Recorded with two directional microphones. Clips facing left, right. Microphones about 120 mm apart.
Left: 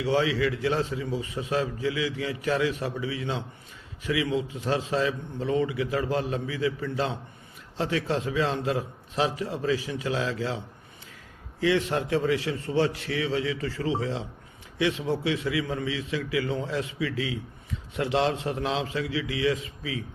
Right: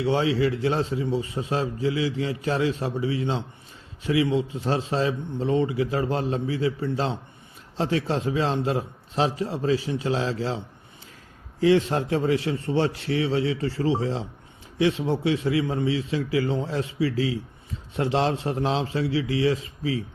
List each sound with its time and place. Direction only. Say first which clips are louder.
0.0 s a man's voice: right 2 dB; 30° right (ahead or behind)
11.6 s a man's voice: right 5 dB; 35° right (ahead or behind)